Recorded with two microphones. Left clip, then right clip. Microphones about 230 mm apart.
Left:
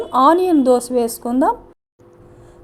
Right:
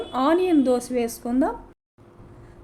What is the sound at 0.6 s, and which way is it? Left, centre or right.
Speech, left.